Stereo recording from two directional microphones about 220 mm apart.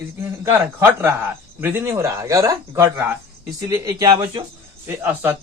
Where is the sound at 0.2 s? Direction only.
10° right (ahead or behind).